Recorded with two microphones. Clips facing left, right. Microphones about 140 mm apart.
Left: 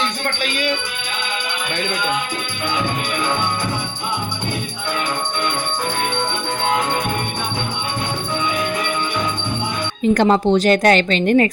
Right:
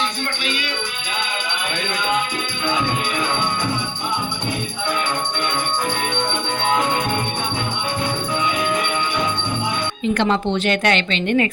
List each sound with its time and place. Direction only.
10.0 s speech: 40° left (ahead or behind)